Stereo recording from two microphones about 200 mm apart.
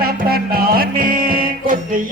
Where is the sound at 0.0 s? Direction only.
50° right (ahead or behind).